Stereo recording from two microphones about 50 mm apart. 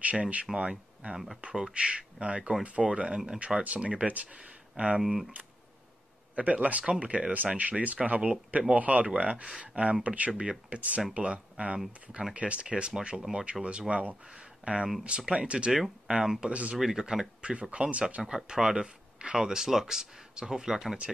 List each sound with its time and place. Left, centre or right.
0.0 s speech: right
1.1 s speech: centre
5.0 s speech: centre
6.3 s speech: right
15.8 s speech: centre
16.4 s speech: right
16.7 s speech: centre; by 18.2 s right
18.2 s speech: centre